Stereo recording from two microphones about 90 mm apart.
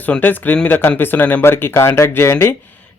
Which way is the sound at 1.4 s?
25° left (ahead or behind).